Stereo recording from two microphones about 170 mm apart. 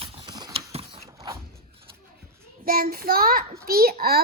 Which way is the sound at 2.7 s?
60° right (ahead or behind).